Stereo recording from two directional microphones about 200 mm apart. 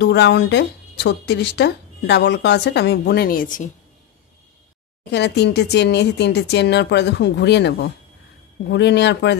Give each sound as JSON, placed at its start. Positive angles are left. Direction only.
{"t": 0.0, "sound": "speech", "side_deg": 55}
{"t": 5.1, "sound": "speech", "side_deg": 55}